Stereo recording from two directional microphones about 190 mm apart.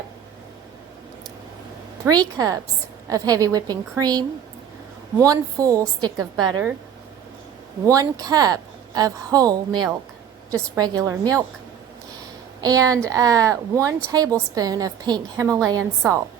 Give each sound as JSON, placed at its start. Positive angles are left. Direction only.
{"t": 2.0, "sound": "a woman's voice", "side_deg": -20}
{"t": 7.9, "sound": "a woman's voice", "side_deg": -20}
{"t": 12.6, "sound": "speech", "side_deg": -20}